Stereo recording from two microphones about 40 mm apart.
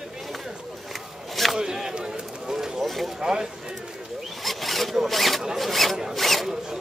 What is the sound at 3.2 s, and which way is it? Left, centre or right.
Speech, centre.